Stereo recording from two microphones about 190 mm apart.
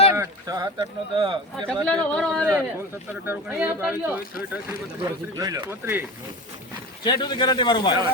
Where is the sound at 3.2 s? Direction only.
10° right (ahead or behind).